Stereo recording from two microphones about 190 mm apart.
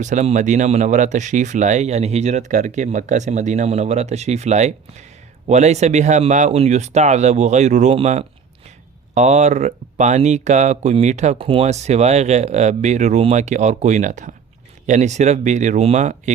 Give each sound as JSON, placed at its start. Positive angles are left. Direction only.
{"t": 0.0, "sound": "speech", "side_deg": -40}